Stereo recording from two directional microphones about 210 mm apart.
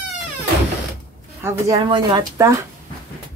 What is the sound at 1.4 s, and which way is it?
Speech, 10° right (ahead or behind).